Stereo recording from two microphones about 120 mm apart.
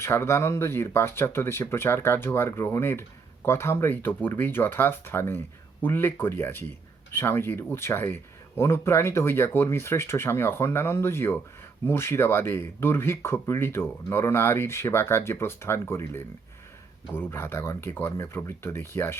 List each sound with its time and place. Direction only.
0.0 s speech: 25° left (ahead or behind)